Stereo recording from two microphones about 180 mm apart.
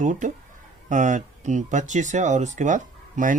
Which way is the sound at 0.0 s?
45° right (ahead or behind).